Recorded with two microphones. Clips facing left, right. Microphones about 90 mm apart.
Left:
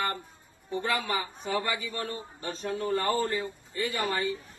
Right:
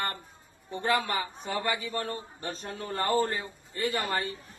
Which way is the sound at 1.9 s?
35° right (ahead or behind).